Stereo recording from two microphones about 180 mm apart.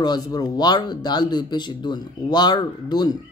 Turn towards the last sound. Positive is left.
turn(degrees=25)  # may be behind; listen again after turning